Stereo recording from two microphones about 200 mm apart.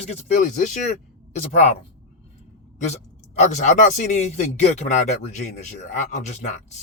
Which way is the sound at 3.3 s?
35° left (ahead or behind).